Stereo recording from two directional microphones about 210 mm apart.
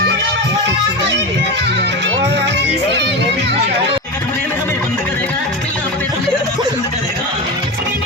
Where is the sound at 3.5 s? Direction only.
25° right (ahead or behind).